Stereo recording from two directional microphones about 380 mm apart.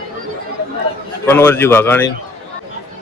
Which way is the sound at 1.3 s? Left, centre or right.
Centre.